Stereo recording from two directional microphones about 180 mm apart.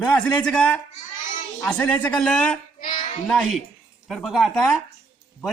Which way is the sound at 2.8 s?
45° left (ahead or behind).